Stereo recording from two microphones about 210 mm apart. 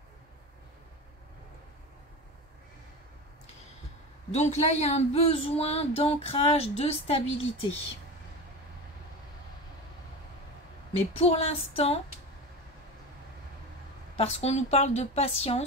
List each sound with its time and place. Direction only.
4.3 s speech: 30° left (ahead or behind)
11.1 s speech: 30° left (ahead or behind)
14.1 s speech: 30° left (ahead or behind)